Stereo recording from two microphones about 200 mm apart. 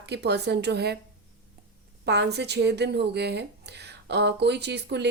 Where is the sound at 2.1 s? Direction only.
55° right (ahead or behind).